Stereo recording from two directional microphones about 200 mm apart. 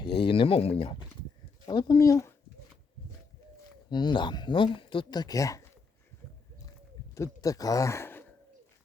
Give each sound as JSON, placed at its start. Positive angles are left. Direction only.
{"t": 0.0, "sound": "speech", "side_deg": 25}
{"t": 1.6, "sound": "speech", "side_deg": 20}
{"t": 3.8, "sound": "speech", "side_deg": 20}
{"t": 7.2, "sound": "speech", "side_deg": 15}